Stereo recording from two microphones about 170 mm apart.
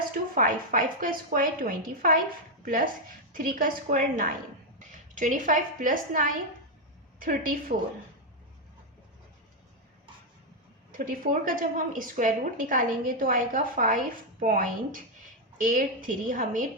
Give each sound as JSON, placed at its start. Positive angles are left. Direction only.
{"t": 0.3, "sound": "a woman's voice", "side_deg": -55}
{"t": 10.9, "sound": "a woman's voice", "side_deg": -55}